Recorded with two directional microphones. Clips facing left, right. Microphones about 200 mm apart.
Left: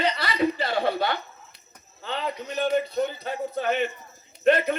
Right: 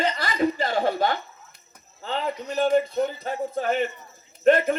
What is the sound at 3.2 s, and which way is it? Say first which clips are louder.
Speech: right 1 dB; 45° right (ahead or behind).